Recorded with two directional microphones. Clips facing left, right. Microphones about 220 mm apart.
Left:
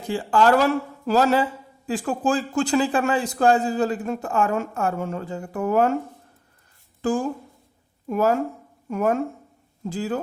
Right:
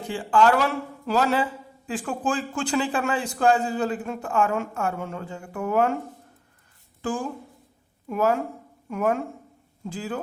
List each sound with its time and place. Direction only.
0.1 s speech: 40° left (ahead or behind)
7.0 s speech: 40° left (ahead or behind)